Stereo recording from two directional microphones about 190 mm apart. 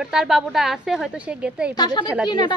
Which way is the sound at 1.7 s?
20° left (ahead or behind).